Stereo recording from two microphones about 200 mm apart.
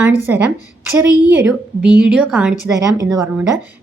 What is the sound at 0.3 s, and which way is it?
Speech, 10° right (ahead or behind).